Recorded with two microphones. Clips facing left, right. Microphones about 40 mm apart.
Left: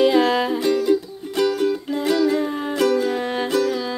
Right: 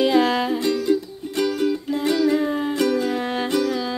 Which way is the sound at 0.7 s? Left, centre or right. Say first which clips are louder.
Left 2 dB; centre.